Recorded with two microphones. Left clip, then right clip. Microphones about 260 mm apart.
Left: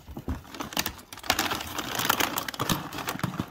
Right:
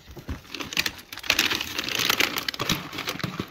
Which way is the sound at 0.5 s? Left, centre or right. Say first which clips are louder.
Right 5 dB; left.